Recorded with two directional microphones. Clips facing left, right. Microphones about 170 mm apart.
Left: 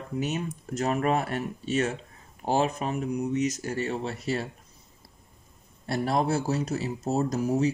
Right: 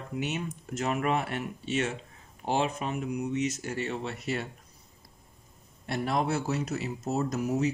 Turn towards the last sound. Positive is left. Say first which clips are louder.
# left 3 dB
turn(degrees=30)  # may be behind; listen again after turning